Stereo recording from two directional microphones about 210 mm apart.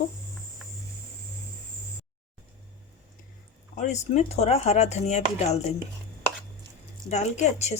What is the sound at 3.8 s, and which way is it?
Speech, 35° left (ahead or behind).